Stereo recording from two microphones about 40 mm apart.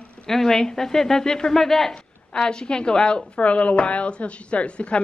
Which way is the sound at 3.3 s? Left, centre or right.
Left.